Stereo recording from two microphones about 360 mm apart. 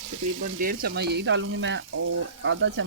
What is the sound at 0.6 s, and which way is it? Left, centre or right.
Speech, right.